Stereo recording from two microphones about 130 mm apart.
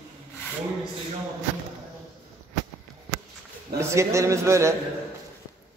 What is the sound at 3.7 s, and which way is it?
A man's voice, 25° right (ahead or behind).